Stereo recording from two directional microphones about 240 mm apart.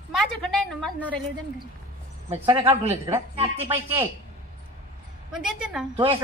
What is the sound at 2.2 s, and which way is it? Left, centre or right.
Speech, centre.